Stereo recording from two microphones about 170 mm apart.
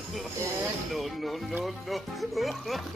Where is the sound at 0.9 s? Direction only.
Centre (ahead or behind).